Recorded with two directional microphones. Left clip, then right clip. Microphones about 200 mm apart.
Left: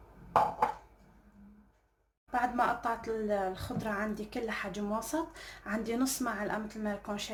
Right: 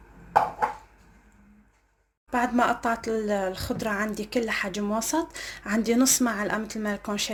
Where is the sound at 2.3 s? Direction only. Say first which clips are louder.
Right 6 dB; 50° right (ahead or behind).